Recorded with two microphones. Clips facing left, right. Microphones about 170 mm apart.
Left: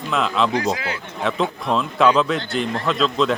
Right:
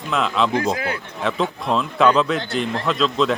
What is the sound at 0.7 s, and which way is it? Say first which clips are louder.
Speech: right 2 dB; 50° right (ahead or behind).